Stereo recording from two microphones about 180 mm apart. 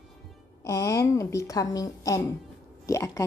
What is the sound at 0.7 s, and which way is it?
A woman's voice, 15° left (ahead or behind).